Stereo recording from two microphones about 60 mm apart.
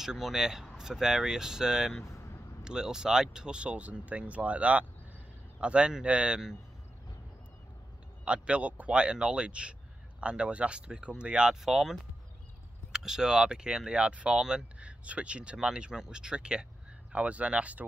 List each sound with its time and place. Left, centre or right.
0.0 s speech: centre
8.3 s speech: centre
11.6 s speech: centre; by 17.8 s right